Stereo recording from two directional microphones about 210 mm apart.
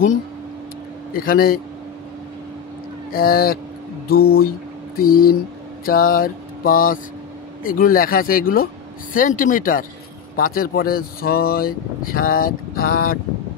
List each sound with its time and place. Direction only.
1.1 s speech: 45° left (ahead or behind)
3.1 s speech: 45° left (ahead or behind)
4.1 s mantra: 45° left (ahead or behind)
5.9 s a sound: 45° left (ahead or behind)
7.6 s speech: 40° left (ahead or behind)